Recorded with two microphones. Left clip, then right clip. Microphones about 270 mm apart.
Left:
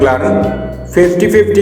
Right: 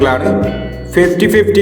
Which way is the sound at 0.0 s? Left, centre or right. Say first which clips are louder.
Left 2 dB; right.